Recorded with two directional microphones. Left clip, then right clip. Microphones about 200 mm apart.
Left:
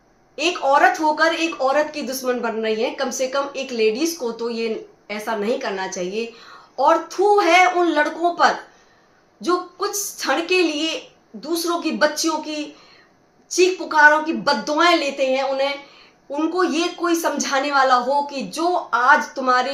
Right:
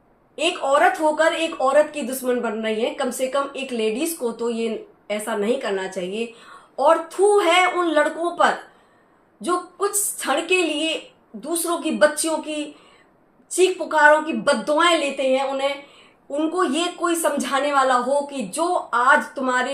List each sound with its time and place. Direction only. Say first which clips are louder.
0.3 s speech: left 2 dB; 15° left (ahead or behind)
7.3 s a woman's voice: left 5 dB; 15° left (ahead or behind)
16.3 s a woman's voice: left 1 dB; 15° left (ahead or behind)